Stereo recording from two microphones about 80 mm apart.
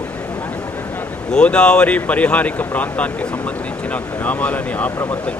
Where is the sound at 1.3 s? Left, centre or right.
Centre.